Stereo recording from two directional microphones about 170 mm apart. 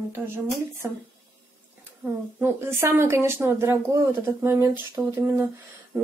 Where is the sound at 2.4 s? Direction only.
15° right (ahead or behind).